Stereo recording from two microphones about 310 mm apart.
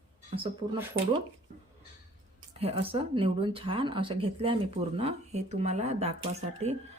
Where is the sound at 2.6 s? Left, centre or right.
Centre.